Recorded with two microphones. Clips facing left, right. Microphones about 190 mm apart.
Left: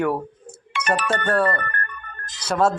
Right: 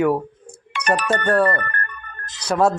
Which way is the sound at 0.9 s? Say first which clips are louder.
Right 2 dB; 40° right (ahead or behind).